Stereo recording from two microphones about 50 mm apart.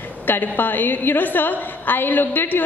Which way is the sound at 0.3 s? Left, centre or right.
Left.